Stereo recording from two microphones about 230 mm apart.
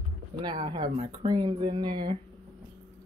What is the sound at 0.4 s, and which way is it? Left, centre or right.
Speech, centre.